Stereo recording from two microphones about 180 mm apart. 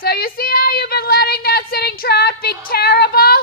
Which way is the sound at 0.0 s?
55° left (ahead or behind).